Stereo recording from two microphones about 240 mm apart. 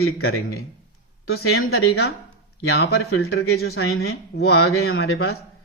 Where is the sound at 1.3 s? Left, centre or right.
Left.